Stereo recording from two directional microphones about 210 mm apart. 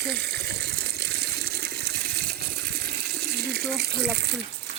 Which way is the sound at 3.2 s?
50° right (ahead or behind).